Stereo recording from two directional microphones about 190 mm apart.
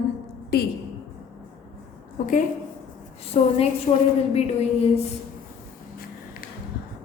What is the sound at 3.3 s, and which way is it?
Speech, 35° left (ahead or behind).